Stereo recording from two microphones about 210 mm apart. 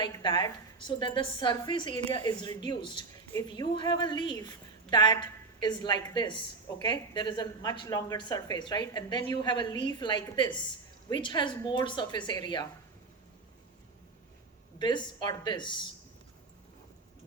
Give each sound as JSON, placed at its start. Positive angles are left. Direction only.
{"t": 0.0, "sound": "a woman's voice", "side_deg": 20}
{"t": 14.8, "sound": "a woman's voice", "side_deg": 20}